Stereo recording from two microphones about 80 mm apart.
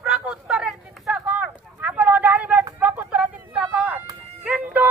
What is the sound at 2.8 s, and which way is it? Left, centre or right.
Vehicle, centre.